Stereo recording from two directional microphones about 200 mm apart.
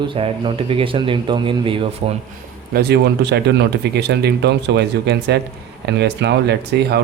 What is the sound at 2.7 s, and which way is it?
Speech, 55° right (ahead or behind).